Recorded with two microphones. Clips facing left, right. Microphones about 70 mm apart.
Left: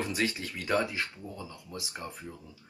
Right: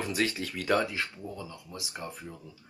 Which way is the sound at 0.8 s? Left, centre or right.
Centre.